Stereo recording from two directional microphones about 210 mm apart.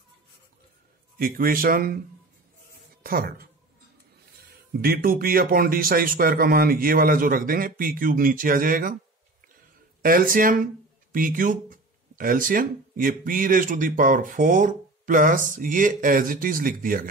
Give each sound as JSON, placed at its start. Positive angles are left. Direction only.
{"t": 1.1, "sound": "speech", "side_deg": -45}
{"t": 3.0, "sound": "speech", "side_deg": -45}
{"t": 4.8, "sound": "speech", "side_deg": -45}
{"t": 10.0, "sound": "speech", "side_deg": -45}